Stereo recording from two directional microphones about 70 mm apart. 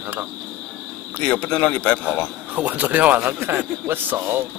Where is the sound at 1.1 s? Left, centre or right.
Centre.